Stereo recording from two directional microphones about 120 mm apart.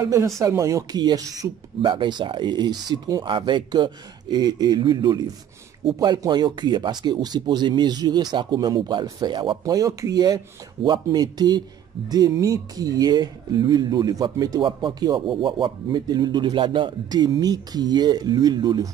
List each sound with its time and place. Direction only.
0.0 s speech: 25° right (ahead or behind)
14.6 s speech: 45° right (ahead or behind)